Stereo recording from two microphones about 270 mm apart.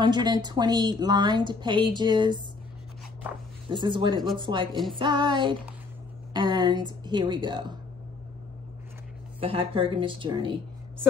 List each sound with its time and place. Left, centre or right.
0.0 s a woman's voice: centre
3.7 s a woman's voice: centre
9.4 s a woman's voice: centre